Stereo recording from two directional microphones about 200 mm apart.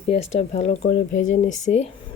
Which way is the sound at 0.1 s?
30° left (ahead or behind).